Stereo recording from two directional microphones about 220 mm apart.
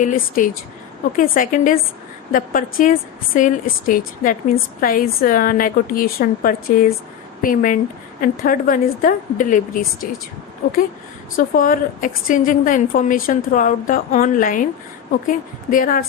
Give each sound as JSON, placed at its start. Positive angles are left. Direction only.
{"t": 0.0, "sound": "a woman's voice", "side_deg": 35}
{"t": 11.3, "sound": "a woman's voice", "side_deg": 40}